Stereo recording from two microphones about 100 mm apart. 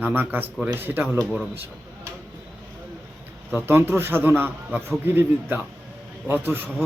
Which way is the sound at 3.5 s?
20° right (ahead or behind).